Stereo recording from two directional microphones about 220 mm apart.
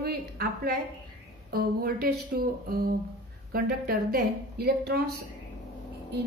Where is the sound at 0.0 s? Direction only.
45° right (ahead or behind).